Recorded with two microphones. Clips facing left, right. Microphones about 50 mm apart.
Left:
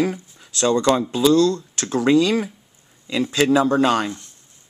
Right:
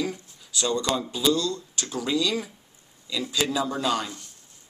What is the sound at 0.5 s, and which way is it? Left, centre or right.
Speech, left.